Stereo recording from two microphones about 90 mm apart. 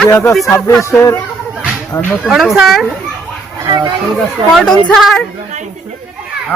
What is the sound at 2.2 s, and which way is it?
Speech, 5° right (ahead or behind).